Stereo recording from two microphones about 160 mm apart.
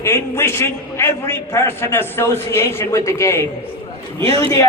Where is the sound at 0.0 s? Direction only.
15° left (ahead or behind).